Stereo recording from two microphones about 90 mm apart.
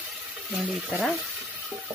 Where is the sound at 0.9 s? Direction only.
Centre (ahead or behind).